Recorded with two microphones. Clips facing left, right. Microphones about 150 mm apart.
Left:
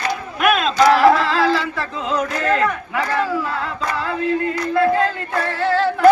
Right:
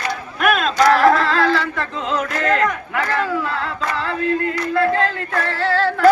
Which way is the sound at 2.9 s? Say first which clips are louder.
Even; 15° left (ahead or behind).